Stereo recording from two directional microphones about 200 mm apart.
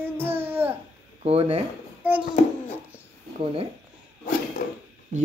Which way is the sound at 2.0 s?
10° right (ahead or behind).